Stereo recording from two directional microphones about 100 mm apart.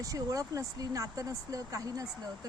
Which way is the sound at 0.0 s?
35° right (ahead or behind).